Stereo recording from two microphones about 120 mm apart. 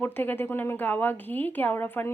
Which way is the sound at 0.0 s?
15° left (ahead or behind).